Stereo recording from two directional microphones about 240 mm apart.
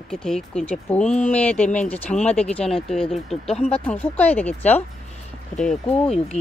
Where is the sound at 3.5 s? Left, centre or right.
Left.